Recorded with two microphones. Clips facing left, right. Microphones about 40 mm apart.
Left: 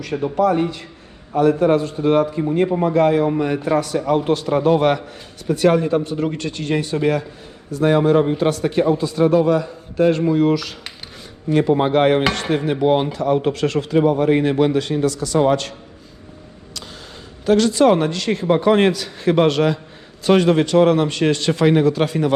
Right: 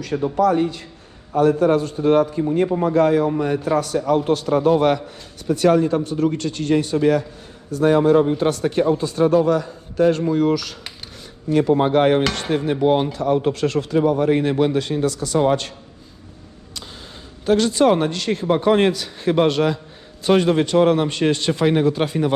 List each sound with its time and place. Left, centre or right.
0.0 s a man's voice: left
3.8 s a man's voice: left
12.3 s a man's voice: left
17.4 s a man's voice: left
20.2 s a man's voice: left